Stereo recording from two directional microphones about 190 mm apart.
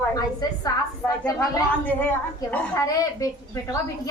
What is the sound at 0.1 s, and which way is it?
A woman's voice, 20° left (ahead or behind).